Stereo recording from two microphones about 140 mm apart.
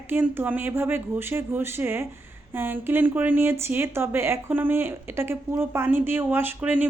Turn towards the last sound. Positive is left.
turn(degrees=-10)  # may be behind; listen again after turning